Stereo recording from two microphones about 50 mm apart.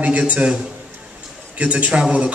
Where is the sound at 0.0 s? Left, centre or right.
Right.